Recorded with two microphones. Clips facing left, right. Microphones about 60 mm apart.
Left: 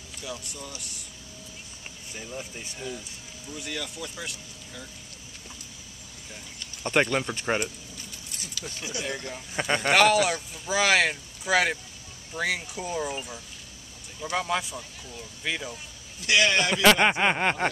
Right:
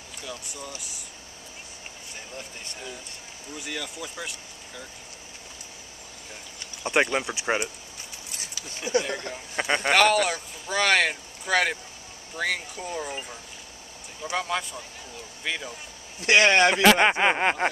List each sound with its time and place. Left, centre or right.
0.2 s speech: centre
2.1 s speech: centre
3.5 s speech: centre
6.8 s speech: centre
8.7 s speech: right
9.3 s speech: centre
14.3 s speech: centre
16.2 s speech: right
16.8 s a sound: centre